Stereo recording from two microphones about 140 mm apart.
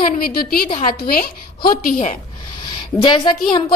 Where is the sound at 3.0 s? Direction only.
35° left (ahead or behind).